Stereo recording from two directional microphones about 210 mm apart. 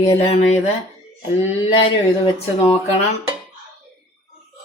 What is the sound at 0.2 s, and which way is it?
Speech, 30° left (ahead or behind).